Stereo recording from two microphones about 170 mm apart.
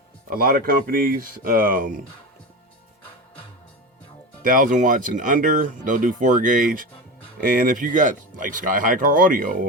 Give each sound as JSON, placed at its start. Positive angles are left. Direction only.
{"t": 0.3, "sound": "speech", "side_deg": -60}
{"t": 4.4, "sound": "speech", "side_deg": -55}